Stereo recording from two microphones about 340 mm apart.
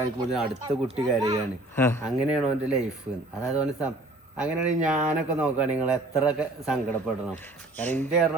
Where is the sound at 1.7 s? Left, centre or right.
Centre.